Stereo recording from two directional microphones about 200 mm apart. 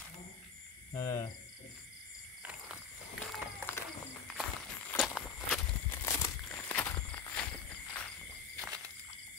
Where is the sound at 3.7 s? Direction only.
10° left (ahead or behind).